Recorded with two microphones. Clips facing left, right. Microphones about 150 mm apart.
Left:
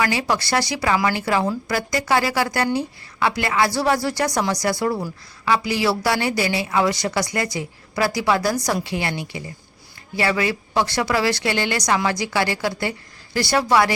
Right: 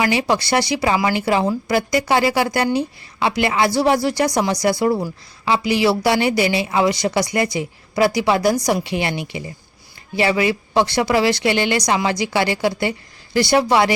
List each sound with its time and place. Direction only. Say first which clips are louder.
0.0 s a woman's voice: right 3 dB; 20° right (ahead or behind)